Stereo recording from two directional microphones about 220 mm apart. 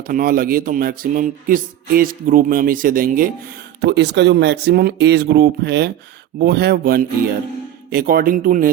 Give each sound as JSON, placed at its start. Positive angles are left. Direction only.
{"t": 0.1, "sound": "speech", "side_deg": -40}
{"t": 3.8, "sound": "speech", "side_deg": -50}